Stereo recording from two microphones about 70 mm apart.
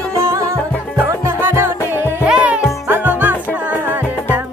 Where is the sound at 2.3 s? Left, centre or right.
Centre.